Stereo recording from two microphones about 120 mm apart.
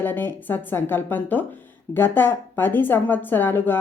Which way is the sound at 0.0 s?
15° left (ahead or behind).